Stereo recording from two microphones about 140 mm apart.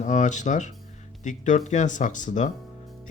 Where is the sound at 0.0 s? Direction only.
60° left (ahead or behind).